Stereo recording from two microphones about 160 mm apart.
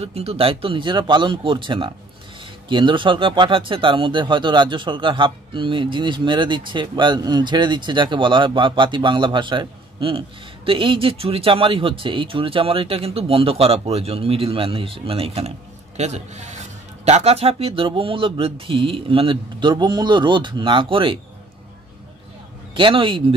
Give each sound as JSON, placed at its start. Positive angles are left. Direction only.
{"t": 0.0, "sound": "speech", "side_deg": -40}
{"t": 22.8, "sound": "speech", "side_deg": -30}